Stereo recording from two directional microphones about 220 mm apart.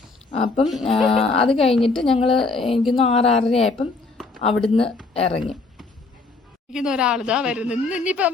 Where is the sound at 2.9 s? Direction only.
25° left (ahead or behind).